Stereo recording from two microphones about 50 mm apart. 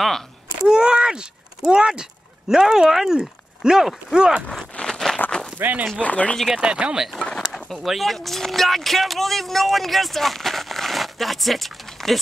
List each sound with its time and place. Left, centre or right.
0.7 s speech: centre
4.8 s a sound: centre
5.6 s speech: right
5.9 s speech: left
6.5 s speech: right
7.2 s a sound: centre
7.7 s speech: centre